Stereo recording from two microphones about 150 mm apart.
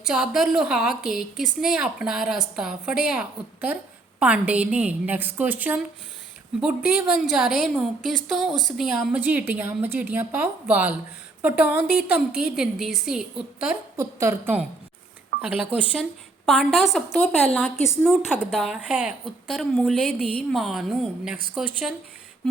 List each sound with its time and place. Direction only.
0.1 s a woman's voice: 5° right (ahead or behind)
9.1 s a woman's voice: 10° right (ahead or behind)
13.9 s a woman's voice: 20° right (ahead or behind); by 17.0 s centre (ahead or behind)
17.2 s a woman's voice: 10° left (ahead or behind)
18.1 s a woman's voice: centre (ahead or behind)